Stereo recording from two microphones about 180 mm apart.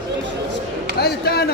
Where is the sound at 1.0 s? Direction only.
60° left (ahead or behind).